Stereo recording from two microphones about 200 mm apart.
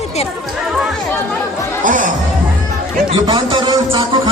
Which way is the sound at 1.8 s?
40° right (ahead or behind).